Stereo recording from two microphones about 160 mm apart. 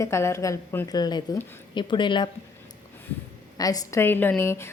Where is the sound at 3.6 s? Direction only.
20° left (ahead or behind).